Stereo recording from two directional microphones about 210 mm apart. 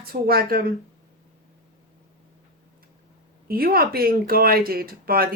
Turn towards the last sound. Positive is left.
turn(degrees=-45)  # may be behind; listen again after turning